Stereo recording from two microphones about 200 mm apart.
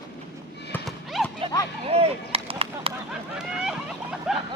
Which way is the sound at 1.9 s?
30° right (ahead or behind).